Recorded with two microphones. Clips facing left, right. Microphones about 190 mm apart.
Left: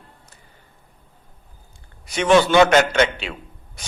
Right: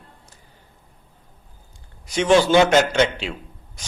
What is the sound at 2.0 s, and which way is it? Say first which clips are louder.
Speech: even; 60° left (ahead or behind).